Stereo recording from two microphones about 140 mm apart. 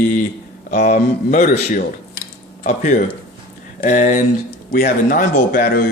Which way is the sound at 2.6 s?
65° left (ahead or behind).